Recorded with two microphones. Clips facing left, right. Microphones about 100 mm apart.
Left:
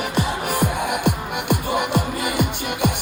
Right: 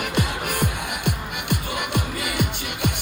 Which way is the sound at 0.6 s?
50° left (ahead or behind).